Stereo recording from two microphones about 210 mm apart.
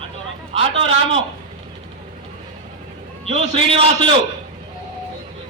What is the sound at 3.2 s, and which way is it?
Speech, 30° right (ahead or behind).